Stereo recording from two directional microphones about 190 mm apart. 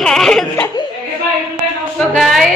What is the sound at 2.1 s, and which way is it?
Speech, centre (ahead or behind).